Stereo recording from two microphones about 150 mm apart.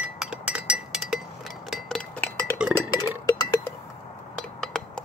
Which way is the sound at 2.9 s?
25° left (ahead or behind).